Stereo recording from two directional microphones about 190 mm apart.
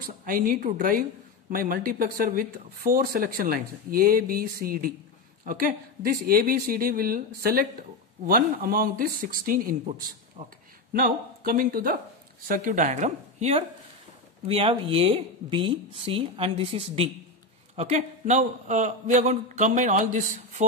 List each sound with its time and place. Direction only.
0.0 s a woman's voice: 45° right (ahead or behind)